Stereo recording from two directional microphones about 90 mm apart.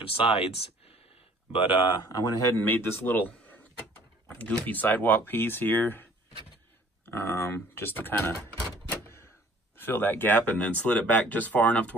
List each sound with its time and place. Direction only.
0.1 s speech: 90° left; by 2.0 s 70° left (ahead or behind)
2.0 s speech: 40° left (ahead or behind)
2.5 s speech: 25° left (ahead or behind)
7.1 s speech: 25° left (ahead or behind)
9.0 s door: 30° left (ahead or behind)
9.8 s speech: 20° left (ahead or behind)